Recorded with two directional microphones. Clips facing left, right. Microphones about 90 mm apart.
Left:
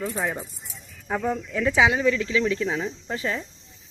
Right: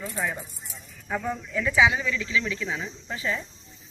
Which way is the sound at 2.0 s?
40° left (ahead or behind).